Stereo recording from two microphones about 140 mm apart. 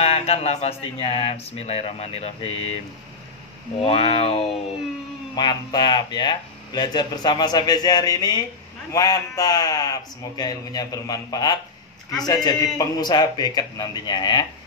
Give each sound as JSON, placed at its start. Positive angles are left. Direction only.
{"t": 0.0, "sound": "speech", "side_deg": 45}
{"t": 3.8, "sound": "speech", "side_deg": 45}
{"t": 5.3, "sound": "a man's voice", "side_deg": 30}